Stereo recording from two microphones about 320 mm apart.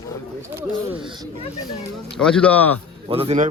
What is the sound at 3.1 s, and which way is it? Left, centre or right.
Speech, centre.